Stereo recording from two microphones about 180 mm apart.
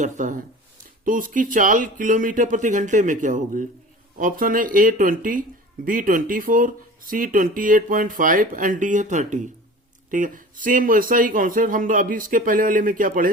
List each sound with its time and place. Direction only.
0.0 s speech: 45° right (ahead or behind)